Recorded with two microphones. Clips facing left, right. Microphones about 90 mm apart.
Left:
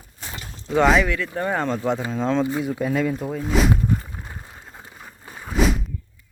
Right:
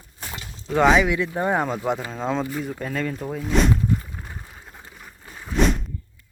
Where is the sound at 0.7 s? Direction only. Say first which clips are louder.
Even; centre (ahead or behind).